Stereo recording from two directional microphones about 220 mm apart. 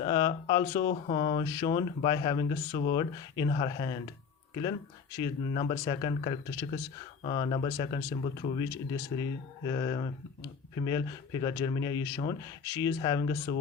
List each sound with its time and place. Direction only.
0.0 s speech: 20° left (ahead or behind)
5.1 s speech: 20° left (ahead or behind)